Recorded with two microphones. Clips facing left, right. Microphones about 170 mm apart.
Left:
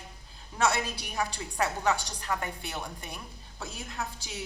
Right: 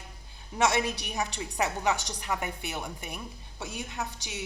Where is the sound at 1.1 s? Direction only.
20° right (ahead or behind).